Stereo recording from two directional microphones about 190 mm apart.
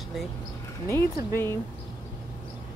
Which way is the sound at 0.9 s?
15° left (ahead or behind).